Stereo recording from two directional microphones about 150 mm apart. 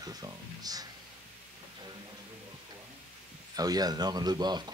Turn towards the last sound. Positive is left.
turn(degrees=-30)  # may be behind; listen again after turning